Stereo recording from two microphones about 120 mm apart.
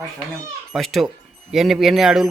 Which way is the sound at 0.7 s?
Centre (ahead or behind).